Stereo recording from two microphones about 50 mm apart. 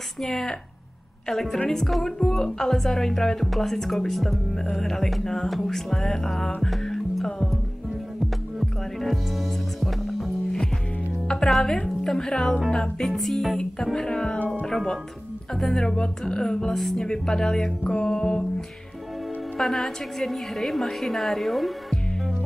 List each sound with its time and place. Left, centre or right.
0.2 s a woman's voice: centre
6.6 s music: centre
8.5 s music: centre
11.2 s speech: centre
13.1 s a woman's voice: centre
13.9 s speech: centre
16.7 s a woman's voice: centre
17.0 s speech: centre
18.0 s music: centre
19.6 s a woman's voice: centre